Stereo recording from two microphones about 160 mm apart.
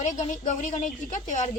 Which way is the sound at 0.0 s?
50° left (ahead or behind).